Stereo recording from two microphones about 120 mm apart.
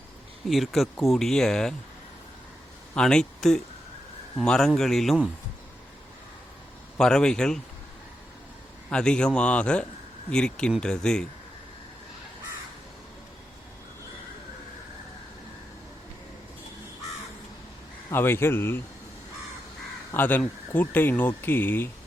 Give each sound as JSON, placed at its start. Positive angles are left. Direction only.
{"t": 0.5, "sound": "speech", "side_deg": 0}
{"t": 2.9, "sound": "speech", "side_deg": 5}
{"t": 6.9, "sound": "speech", "side_deg": 5}
{"t": 8.9, "sound": "speech", "side_deg": 5}
{"t": 18.1, "sound": "speech", "side_deg": 20}
{"t": 20.1, "sound": "speech", "side_deg": 15}